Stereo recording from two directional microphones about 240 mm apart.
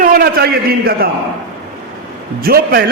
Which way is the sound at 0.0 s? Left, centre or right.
Right.